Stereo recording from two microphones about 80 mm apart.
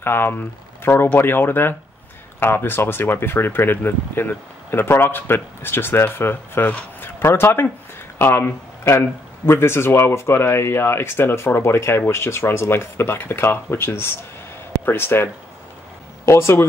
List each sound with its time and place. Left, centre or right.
0.0 s speech: left
16.3 s speech: left